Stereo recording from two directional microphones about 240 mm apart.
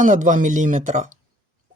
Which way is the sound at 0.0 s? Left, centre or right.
Right.